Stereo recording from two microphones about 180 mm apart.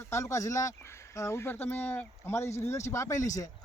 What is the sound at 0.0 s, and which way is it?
Speech, 15° left (ahead or behind).